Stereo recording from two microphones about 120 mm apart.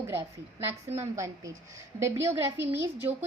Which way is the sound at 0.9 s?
25° right (ahead or behind).